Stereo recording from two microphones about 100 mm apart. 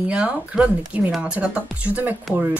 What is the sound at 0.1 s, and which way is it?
Speech, 10° right (ahead or behind).